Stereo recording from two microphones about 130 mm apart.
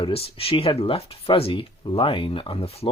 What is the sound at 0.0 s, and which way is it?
Speech, 50° left (ahead or behind).